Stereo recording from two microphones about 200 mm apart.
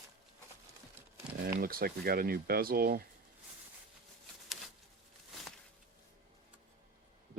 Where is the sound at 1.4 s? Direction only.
50° right (ahead or behind).